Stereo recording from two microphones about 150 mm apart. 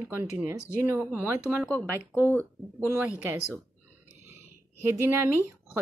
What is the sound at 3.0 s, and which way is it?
Speech, 10° right (ahead or behind).